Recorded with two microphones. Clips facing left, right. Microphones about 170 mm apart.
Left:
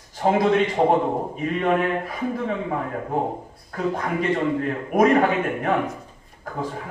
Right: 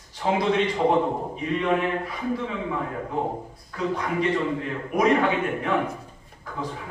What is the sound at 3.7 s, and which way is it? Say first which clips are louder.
A man's voice: left 2 dB; 50° left (ahead or behind).